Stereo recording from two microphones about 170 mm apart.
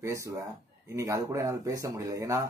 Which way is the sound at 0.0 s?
20° right (ahead or behind).